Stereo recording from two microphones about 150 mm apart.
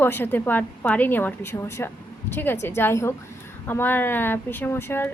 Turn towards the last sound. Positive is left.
turn(degrees=15)  # may be behind; listen again after turning